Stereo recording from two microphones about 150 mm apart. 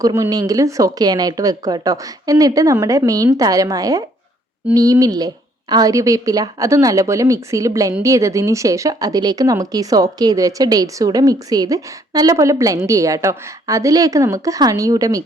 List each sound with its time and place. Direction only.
0.0 s speech: 20° right (ahead or behind)